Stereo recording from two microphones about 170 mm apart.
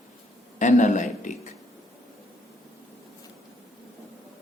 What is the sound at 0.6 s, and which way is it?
Speech, 45° left (ahead or behind).